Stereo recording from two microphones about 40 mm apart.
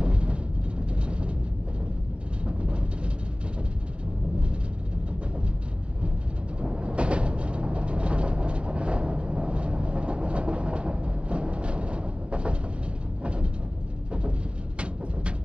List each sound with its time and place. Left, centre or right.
0.0 s vehicle: right
2.4 s train: right
6.6 s vehicle: right
13.2 s a sound: right